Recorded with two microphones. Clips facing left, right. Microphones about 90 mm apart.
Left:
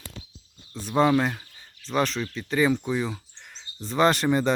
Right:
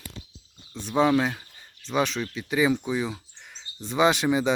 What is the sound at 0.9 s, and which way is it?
Speech, centre (ahead or behind).